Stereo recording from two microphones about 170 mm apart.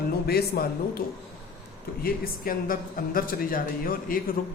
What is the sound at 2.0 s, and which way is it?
A woman's voice, 60° left (ahead or behind).